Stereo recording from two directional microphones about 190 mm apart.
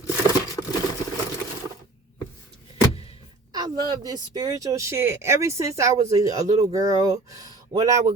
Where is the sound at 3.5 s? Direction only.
20° right (ahead or behind).